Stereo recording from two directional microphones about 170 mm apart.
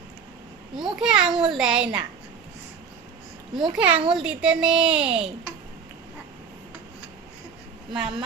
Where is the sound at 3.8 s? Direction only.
10° right (ahead or behind).